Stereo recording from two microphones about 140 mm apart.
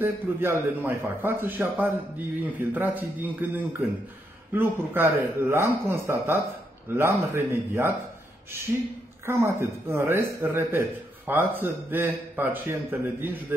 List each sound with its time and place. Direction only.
0.0 s a man's voice: 15° right (ahead or behind)
9.2 s a man's voice: 20° right (ahead or behind)